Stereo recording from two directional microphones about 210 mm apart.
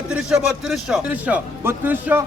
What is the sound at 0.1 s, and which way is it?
Speech, 5° right (ahead or behind).